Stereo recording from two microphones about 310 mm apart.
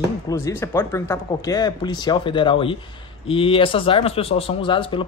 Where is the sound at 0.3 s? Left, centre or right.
Centre.